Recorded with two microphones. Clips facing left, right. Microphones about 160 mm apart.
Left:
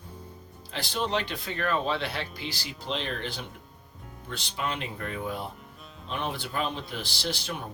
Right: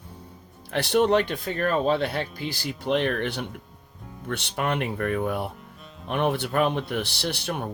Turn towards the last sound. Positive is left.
turn(degrees=-60)  # may be behind; listen again after turning